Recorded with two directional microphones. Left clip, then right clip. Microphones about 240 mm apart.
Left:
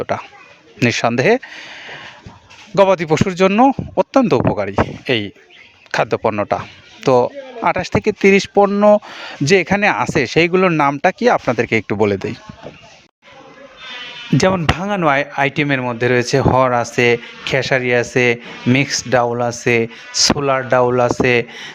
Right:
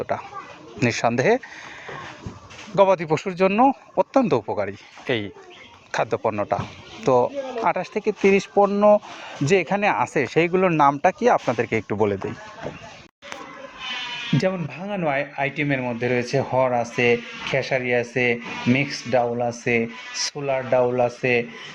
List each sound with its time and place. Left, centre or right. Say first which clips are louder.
0.0 s speech: left 5 dB; left
14.3 s speech: left 11 dB; left